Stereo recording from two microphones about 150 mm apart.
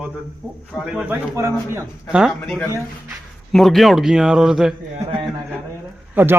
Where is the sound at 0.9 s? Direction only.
5° right (ahead or behind).